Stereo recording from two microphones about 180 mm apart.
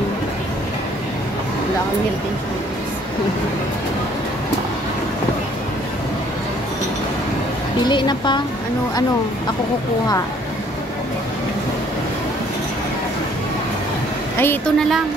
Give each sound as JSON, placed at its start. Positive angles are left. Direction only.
{"t": 7.8, "sound": "a woman's voice", "side_deg": 25}
{"t": 14.4, "sound": "speech", "side_deg": 10}